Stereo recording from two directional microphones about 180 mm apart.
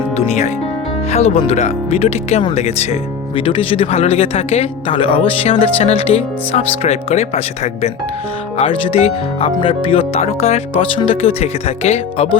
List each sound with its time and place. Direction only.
0.2 s speech: 40° left (ahead or behind)